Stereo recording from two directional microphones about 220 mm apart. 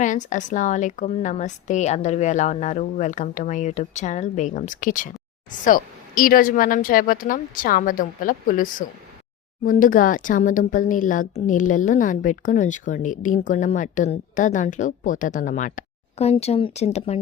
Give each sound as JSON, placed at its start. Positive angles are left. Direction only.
{"t": 0.0, "sound": "speech", "side_deg": 35}